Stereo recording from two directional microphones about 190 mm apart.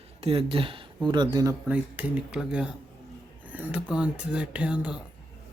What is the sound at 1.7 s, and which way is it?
Speech, 5° right (ahead or behind).